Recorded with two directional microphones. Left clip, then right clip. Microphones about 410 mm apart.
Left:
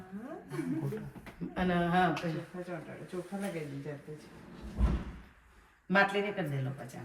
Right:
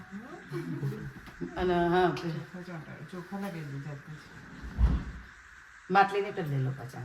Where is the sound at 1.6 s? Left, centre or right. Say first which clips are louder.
Right 4 dB; right.